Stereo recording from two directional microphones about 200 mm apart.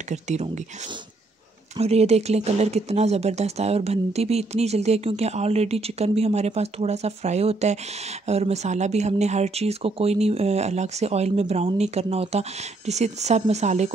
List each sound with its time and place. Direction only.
0.1 s speech: 35° right (ahead or behind)
1.8 s speech: 30° right (ahead or behind)